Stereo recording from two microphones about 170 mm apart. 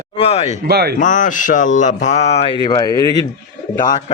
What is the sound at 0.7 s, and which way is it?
Speech, 70° right (ahead or behind).